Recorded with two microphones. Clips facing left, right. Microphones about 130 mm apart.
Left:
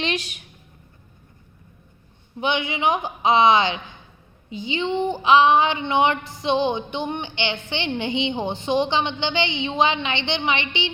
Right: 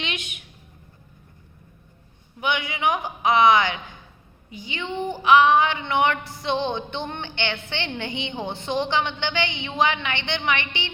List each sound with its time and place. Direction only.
0.0 s a woman's voice: 35° left (ahead or behind)
2.4 s speech: 25° left (ahead or behind)